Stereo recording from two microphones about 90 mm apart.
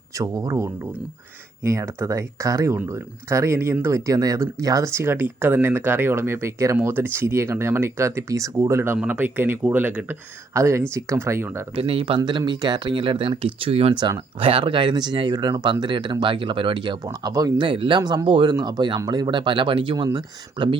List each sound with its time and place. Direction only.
0.2 s speech: 40° right (ahead or behind)
9.0 s speech: 15° right (ahead or behind)
10.5 s speech: 35° right (ahead or behind)
11.7 s speech: 90° right; by 12.4 s 65° right (ahead or behind)
12.5 s speech: 55° right (ahead or behind)
17.1 s speech: 40° right (ahead or behind)
17.6 s speech: 65° right (ahead or behind)
18.3 s speech: 70° right (ahead or behind)
18.6 s speech: 55° right (ahead or behind)